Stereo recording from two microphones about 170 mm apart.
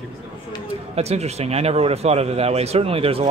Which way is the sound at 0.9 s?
40° right (ahead or behind).